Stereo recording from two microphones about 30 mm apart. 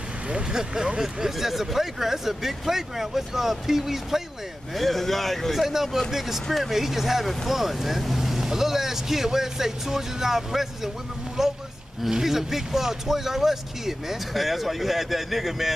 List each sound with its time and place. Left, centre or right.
0.5 s speech: centre
4.7 s speech: centre
5.6 s speech: centre